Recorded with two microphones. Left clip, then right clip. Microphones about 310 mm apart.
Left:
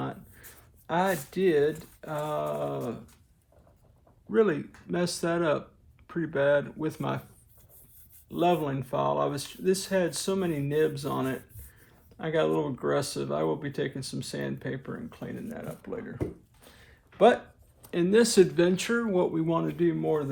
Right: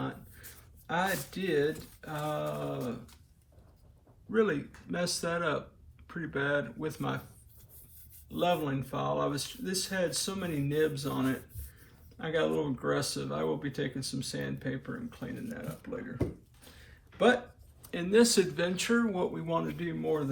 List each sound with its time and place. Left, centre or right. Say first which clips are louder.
0.0 s speech: left 3 dB; left
4.3 s speech: left 4 dB; left
8.3 s speech: left 4 dB; left
17.8 s speech: left 2 dB; left